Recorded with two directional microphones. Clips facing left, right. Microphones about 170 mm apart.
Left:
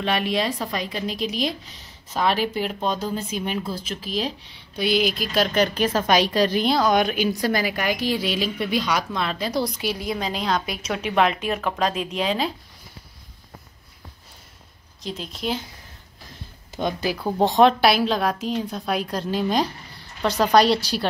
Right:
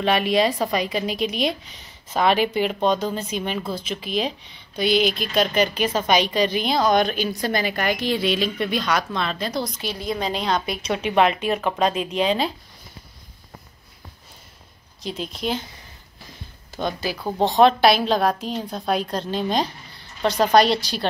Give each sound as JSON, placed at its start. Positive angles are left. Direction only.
{"t": 0.0, "sound": "speech", "side_deg": 0}
{"t": 1.1, "sound": "speech", "side_deg": -60}
{"t": 2.1, "sound": "speech", "side_deg": 0}
{"t": 3.7, "sound": "speech", "side_deg": -60}
{"t": 4.5, "sound": "a woman's voice", "side_deg": 5}
{"t": 15.0, "sound": "speech", "side_deg": 0}
{"t": 16.7, "sound": "a woman's voice", "side_deg": 15}
{"t": 17.2, "sound": "a woman's voice", "side_deg": 5}